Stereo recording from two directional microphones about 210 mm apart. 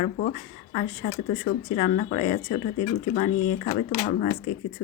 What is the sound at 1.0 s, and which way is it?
Speech, 35° left (ahead or behind).